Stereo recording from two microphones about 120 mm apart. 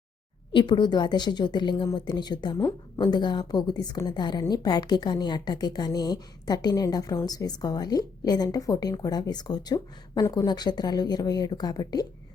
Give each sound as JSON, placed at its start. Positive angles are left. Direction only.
{"t": 0.5, "sound": "a woman's voice", "side_deg": 40}